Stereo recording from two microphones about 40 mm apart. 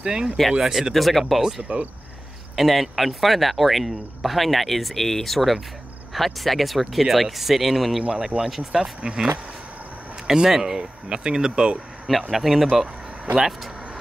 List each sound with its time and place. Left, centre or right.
0.0 s speech: centre
0.9 s speech: centre
1.6 s speech: right
2.5 s speech: centre
9.0 s speech: centre
10.3 s speech: centre
12.1 s speech: centre
12.8 s a sound: right
13.4 s speech: centre